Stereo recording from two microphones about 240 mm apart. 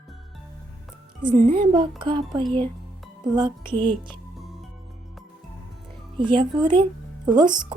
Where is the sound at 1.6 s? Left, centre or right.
Centre.